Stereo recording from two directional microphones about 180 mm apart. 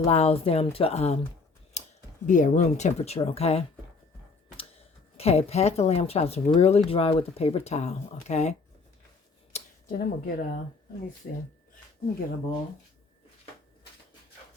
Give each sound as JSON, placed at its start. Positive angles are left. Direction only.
{"t": 0.0, "sound": "speech", "side_deg": 35}
{"t": 1.7, "sound": "scissors", "side_deg": 40}
{"t": 2.2, "sound": "speech", "side_deg": 45}
{"t": 5.1, "sound": "speech", "side_deg": 35}
{"t": 9.5, "sound": "a sound", "side_deg": 35}
{"t": 9.9, "sound": "speech", "side_deg": 50}